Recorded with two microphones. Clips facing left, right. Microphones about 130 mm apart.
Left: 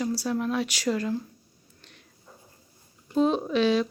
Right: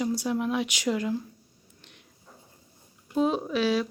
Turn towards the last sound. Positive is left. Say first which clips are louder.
# left 2 dB
turn(degrees=-5)  # may be behind; listen again after turning